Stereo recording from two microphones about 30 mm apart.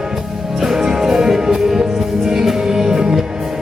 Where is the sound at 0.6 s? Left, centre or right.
Centre.